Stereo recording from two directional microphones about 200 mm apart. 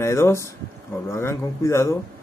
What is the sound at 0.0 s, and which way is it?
Speech, 15° left (ahead or behind).